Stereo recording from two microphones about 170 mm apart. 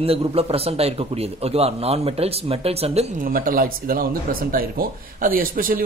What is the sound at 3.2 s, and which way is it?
Speech, 55° right (ahead or behind).